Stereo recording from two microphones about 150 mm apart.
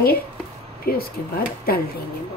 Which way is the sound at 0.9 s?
85° left.